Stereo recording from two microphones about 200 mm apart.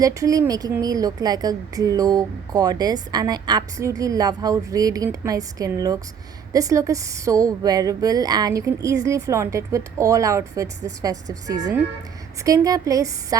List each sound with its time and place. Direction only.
0.0 s a woman's voice: 15° right (ahead or behind)